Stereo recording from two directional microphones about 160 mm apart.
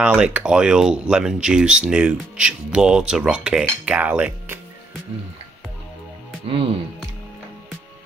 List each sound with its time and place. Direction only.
0.0 s speech: 10° right (ahead or behind)
6.4 s speech: 35° right (ahead or behind)